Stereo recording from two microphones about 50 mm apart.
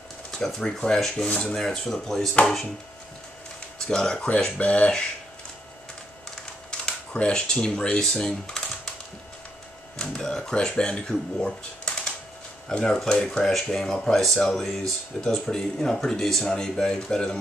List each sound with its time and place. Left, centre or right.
0.3 s speech: centre
3.8 s speech: centre
6.7 s speech: left
9.9 s speech: centre